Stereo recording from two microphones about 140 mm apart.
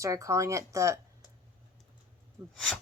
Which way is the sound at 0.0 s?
20° right (ahead or behind).